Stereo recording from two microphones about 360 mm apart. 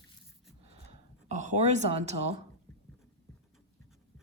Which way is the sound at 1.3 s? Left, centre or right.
Centre.